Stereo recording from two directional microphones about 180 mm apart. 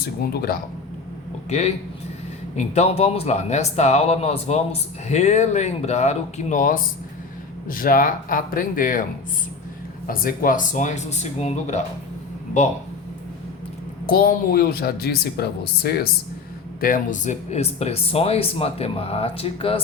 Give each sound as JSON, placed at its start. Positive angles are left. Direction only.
{"t": 1.5, "sound": "speech", "side_deg": 35}
{"t": 10.1, "sound": "speech", "side_deg": 50}
{"t": 14.1, "sound": "speech", "side_deg": 55}
{"t": 16.8, "sound": "speech", "side_deg": 45}